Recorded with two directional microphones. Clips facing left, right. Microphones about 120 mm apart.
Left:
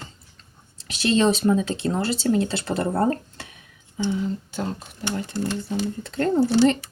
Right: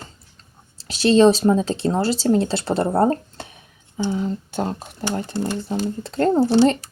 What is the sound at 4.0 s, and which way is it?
Speech, 40° right (ahead or behind).